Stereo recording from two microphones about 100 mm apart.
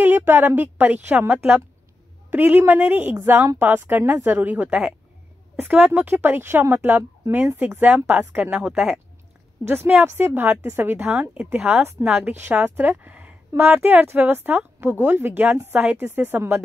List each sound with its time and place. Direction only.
0.0 s a woman's voice: 20° right (ahead or behind)
9.7 s a woman's voice: 20° right (ahead or behind)